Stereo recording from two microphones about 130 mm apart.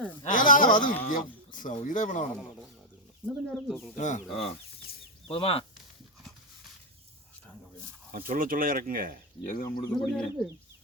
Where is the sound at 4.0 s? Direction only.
70° left (ahead or behind).